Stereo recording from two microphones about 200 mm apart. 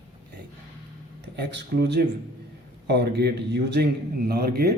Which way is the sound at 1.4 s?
55° right (ahead or behind).